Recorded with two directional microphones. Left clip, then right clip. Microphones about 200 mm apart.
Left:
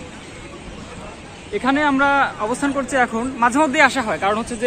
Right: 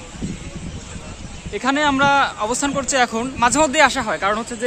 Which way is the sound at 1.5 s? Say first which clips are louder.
Even; 50° right (ahead or behind).